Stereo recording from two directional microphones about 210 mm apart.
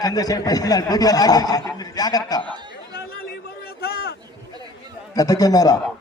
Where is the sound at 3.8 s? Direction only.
50° left (ahead or behind).